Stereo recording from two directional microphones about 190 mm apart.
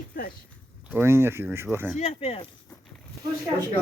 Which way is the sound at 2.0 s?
35° left (ahead or behind).